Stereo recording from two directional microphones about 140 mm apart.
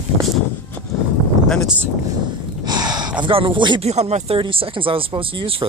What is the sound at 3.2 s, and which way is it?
Speech, 40° right (ahead or behind).